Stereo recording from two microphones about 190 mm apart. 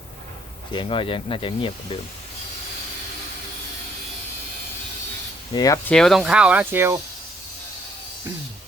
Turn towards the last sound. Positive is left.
turn(degrees=-10)  # may be behind; listen again after turning